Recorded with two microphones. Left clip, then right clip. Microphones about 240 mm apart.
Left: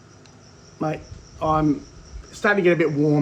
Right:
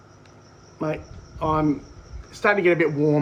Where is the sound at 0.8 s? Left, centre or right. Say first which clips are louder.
Left 1 dB; centre.